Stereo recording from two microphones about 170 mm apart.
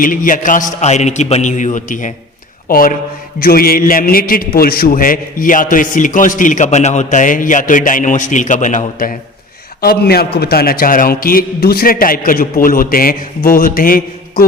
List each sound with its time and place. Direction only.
0.0 s a man's voice: 55° left (ahead or behind)
9.8 s a man's voice: 65° left (ahead or behind)